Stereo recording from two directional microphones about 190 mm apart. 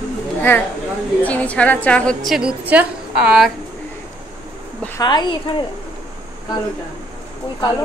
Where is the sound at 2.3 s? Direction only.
5° right (ahead or behind).